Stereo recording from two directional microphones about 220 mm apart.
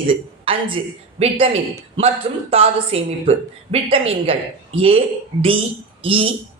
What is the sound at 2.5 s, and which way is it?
A woman's voice, 25° right (ahead or behind).